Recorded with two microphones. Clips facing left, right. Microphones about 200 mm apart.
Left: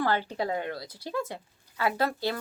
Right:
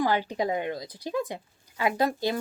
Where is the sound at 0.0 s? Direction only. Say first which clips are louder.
Right 2 dB; 15° right (ahead or behind).